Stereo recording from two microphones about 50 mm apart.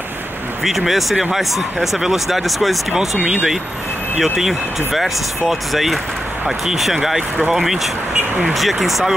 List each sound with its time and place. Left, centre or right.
0.7 s speech: centre
4.2 s speech: centre
8.1 s speech: centre
8.5 s speech: centre